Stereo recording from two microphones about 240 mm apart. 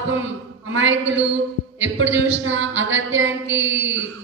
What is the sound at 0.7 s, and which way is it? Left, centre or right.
A woman's voice, right.